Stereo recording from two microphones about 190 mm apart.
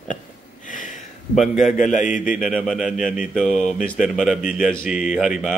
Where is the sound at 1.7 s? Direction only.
40° left (ahead or behind).